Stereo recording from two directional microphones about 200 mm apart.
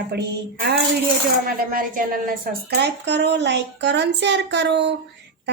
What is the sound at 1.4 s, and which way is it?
Speech, 45° right (ahead or behind).